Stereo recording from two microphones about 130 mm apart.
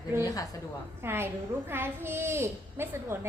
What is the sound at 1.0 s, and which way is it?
A woman's voice, 20° right (ahead or behind).